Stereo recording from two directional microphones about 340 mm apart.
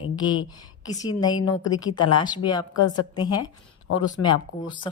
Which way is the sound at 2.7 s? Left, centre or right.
Left.